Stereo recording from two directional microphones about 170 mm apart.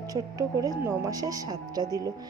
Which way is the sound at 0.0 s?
20° right (ahead or behind).